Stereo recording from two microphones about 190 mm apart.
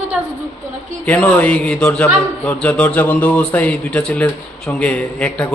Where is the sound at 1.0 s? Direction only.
5° left (ahead or behind).